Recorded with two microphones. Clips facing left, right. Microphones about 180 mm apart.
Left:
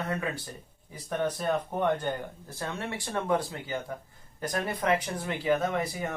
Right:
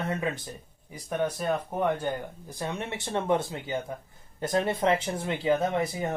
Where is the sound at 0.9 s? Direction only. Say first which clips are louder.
Right 1 dB; 10° right (ahead or behind).